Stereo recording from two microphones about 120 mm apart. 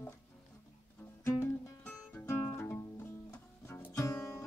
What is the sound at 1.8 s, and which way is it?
Music, 20° left (ahead or behind).